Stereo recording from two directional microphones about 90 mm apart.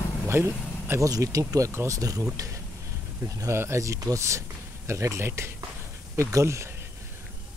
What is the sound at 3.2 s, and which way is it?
Speech, 35° right (ahead or behind).